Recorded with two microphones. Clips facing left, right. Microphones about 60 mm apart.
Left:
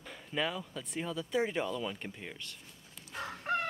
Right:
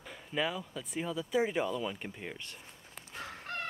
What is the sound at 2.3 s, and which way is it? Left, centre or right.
Speech, right.